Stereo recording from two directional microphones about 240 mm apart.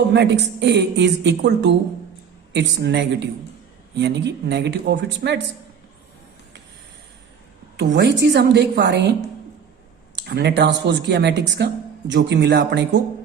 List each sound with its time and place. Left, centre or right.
0.1 s speech: right
7.8 s speech: right
10.2 s speech: right